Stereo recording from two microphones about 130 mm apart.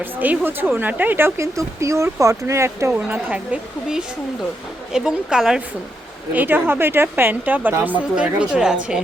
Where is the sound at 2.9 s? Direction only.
10° right (ahead or behind).